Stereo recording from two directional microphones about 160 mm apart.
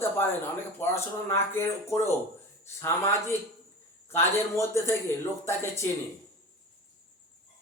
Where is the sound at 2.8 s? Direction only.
15° left (ahead or behind).